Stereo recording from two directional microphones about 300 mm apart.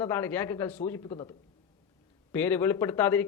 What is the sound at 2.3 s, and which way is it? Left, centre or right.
Speech, centre.